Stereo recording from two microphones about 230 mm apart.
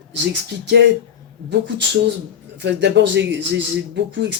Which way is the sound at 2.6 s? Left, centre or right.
Right.